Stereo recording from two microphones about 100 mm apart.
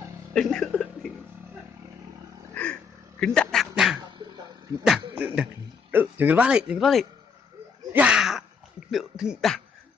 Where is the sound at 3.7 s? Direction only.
5° right (ahead or behind).